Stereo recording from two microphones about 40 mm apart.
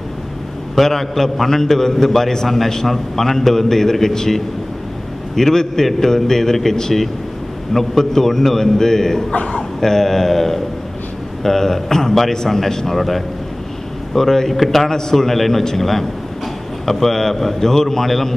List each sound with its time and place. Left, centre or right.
0.7 s a man's voice: centre
9.3 s a man's voice: left
9.6 s a man's voice: centre